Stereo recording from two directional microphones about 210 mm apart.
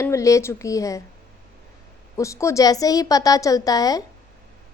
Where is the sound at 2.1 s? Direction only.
15° left (ahead or behind).